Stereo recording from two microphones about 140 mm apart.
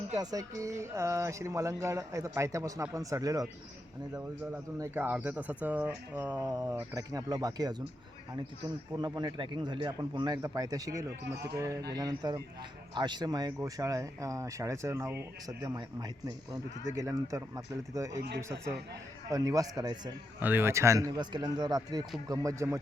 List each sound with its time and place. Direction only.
0.2 s speech: 25° right (ahead or behind)
4.8 s speech: 15° right (ahead or behind)
9.0 s a man's voice: 30° right (ahead or behind)
20.4 s speech: 15° right (ahead or behind)